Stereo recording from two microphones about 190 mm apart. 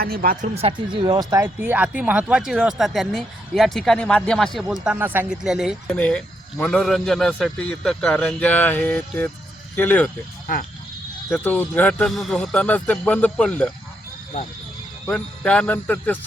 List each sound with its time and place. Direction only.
0.0 s speech: 50° right (ahead or behind)
0.4 s speech: 30° right (ahead or behind); by 10.1 s 10° left (ahead or behind)
10.4 s speech: 45° left (ahead or behind)
11.3 s speech: 5° left (ahead or behind)
15.0 s speech: 5° left (ahead or behind)